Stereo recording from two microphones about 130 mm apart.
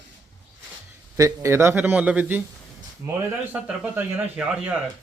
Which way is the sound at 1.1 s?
25° right (ahead or behind).